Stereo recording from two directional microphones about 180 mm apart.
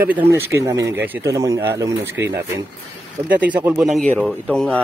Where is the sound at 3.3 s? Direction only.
10° right (ahead or behind).